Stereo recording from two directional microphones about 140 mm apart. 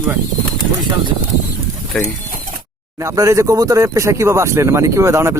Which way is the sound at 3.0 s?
25° right (ahead or behind).